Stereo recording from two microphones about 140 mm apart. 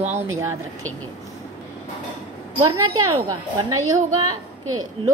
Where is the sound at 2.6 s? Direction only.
30° right (ahead or behind).